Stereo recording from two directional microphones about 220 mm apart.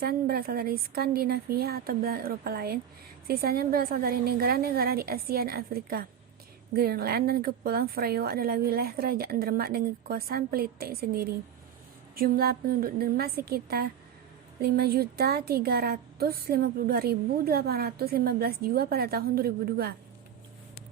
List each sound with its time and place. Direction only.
0.0 s a woman's voice: 45° right (ahead or behind)